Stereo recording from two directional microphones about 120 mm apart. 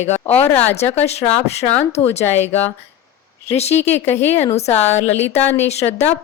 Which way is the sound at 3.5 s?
60° left (ahead or behind).